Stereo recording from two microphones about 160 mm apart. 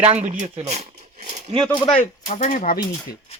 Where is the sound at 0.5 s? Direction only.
45° right (ahead or behind).